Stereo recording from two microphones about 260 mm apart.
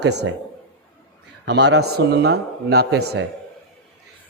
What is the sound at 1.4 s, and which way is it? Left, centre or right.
A man's voice, right.